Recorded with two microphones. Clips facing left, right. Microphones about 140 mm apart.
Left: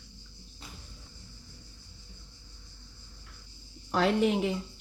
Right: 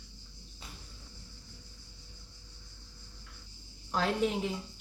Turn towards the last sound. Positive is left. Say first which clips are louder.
# left 5 dB
turn(degrees=70)  # may be behind; listen again after turning